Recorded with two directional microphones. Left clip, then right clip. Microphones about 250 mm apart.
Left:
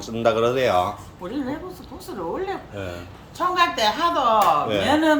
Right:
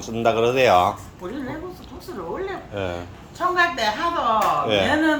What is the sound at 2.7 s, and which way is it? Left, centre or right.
Speech, centre.